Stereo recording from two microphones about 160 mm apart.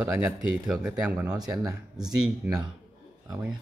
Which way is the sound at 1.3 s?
25° right (ahead or behind).